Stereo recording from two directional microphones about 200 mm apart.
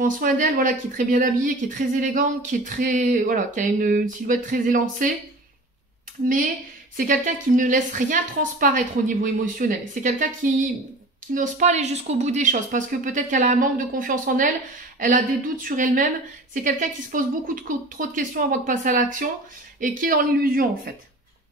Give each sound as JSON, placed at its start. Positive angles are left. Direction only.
{"t": 0.0, "sound": "a woman's voice", "side_deg": -40}
{"t": 7.0, "sound": "a woman's voice", "side_deg": -40}